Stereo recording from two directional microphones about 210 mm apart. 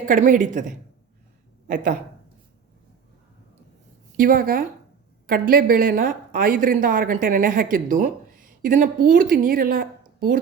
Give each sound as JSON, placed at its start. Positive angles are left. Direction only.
{"t": 0.0, "sound": "speech", "side_deg": -40}
{"t": 1.6, "sound": "speech", "side_deg": -40}
{"t": 4.2, "sound": "speech", "side_deg": -40}